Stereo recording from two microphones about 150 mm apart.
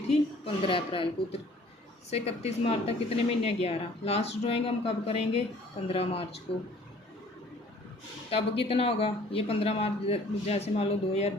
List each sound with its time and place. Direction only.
0.1 s a woman's voice: 35° left (ahead or behind)
8.3 s a woman's voice: 40° left (ahead or behind)